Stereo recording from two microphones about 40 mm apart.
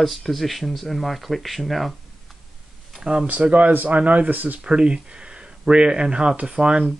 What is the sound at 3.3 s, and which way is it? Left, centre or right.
Speech, right.